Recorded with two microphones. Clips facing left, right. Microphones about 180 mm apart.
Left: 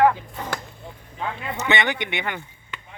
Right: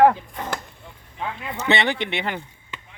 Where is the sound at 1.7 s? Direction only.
30° right (ahead or behind).